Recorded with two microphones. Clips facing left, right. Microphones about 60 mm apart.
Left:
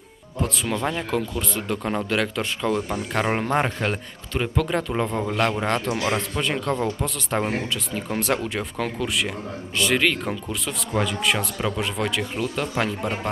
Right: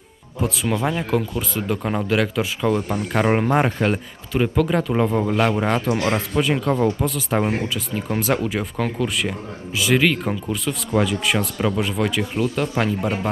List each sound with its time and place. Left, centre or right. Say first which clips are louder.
0.4 s speech: right 3 dB; centre